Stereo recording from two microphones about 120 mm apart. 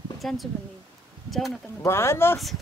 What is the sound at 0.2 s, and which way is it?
Speech, centre (ahead or behind).